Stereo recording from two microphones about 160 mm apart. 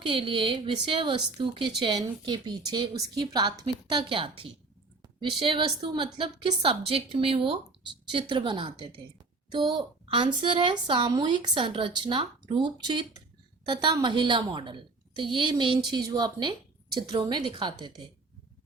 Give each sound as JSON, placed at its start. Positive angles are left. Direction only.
{"t": 0.0, "sound": "a woman's voice", "side_deg": -35}